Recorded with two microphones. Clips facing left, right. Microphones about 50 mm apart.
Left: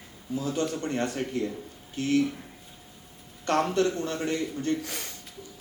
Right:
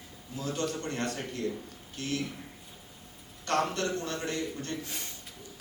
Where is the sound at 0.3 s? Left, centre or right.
Left.